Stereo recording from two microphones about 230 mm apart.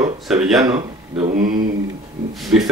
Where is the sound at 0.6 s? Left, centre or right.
Right.